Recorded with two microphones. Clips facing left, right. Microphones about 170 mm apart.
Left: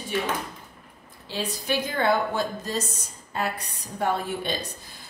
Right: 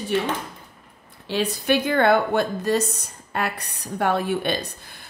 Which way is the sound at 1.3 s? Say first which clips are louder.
Right 6 dB; 65° right (ahead or behind).